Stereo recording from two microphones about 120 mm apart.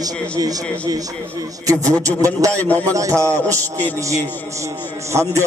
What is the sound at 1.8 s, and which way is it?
A man's voice, 25° right (ahead or behind).